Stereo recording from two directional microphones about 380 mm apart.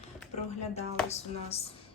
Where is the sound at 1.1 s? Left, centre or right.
Centre.